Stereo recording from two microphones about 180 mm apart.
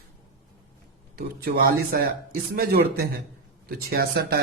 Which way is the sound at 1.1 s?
55° right (ahead or behind).